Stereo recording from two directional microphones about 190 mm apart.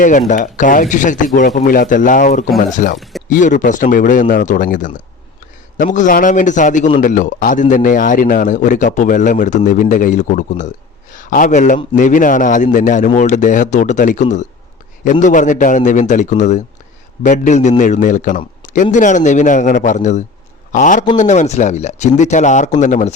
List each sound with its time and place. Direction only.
0.0 s a man's voice: 40° left (ahead or behind)
3.0 s a sound: centre (ahead or behind)
3.2 s a man's voice: 45° left (ahead or behind)